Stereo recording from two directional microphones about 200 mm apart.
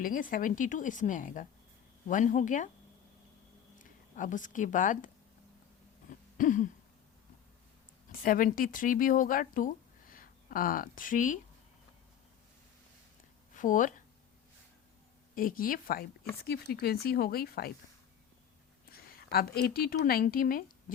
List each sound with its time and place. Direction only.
0.0 s speech: 45° left (ahead or behind)
4.1 s speech: 40° left (ahead or behind)
6.3 s throat clearing: 40° left (ahead or behind)
8.1 s speech: 45° left (ahead or behind)
13.5 s speech: 40° left (ahead or behind)
15.4 s speech: 45° left (ahead or behind)
18.9 s a sound: 50° left (ahead or behind)
20.1 s speech: 45° left (ahead or behind)